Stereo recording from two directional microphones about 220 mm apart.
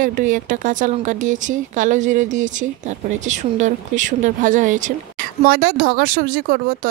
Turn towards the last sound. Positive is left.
turn(degrees=-40)  # may be behind; listen again after turning